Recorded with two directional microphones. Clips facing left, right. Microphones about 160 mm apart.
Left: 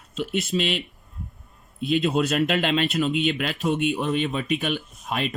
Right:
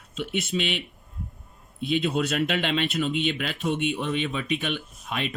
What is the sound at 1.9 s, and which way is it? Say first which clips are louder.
Speech: left 3 dB; 45° left (ahead or behind).